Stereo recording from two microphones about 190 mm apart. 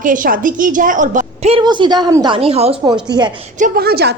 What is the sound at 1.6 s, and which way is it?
A woman's voice, 25° right (ahead or behind).